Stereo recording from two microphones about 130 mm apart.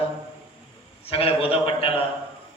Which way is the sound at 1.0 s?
45° left (ahead or behind).